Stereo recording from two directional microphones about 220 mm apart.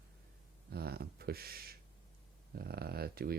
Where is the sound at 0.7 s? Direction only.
45° right (ahead or behind).